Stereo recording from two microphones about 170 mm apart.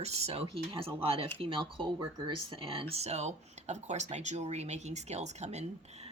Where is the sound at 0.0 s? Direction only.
40° right (ahead or behind).